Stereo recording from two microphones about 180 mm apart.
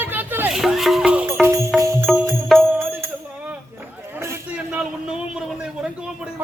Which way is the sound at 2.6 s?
10° right (ahead or behind).